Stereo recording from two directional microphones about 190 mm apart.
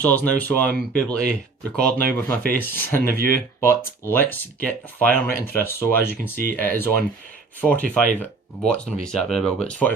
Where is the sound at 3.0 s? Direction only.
50° right (ahead or behind).